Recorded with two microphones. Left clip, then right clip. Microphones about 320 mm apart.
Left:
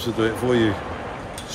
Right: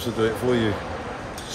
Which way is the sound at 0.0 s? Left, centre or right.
Centre.